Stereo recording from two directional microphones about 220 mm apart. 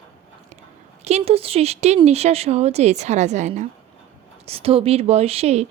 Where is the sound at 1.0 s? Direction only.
30° right (ahead or behind).